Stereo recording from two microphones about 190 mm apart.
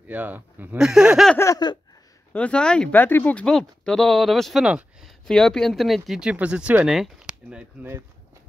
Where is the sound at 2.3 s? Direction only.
5° left (ahead or behind).